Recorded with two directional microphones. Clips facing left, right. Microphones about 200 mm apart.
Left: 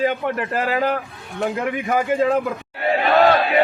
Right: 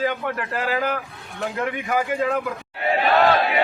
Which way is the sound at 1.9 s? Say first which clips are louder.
Left 5 dB; 30° left (ahead or behind).